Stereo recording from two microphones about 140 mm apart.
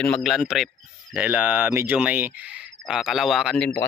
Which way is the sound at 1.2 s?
10° right (ahead or behind).